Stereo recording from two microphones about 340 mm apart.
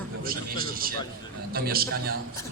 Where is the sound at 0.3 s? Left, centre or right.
Right.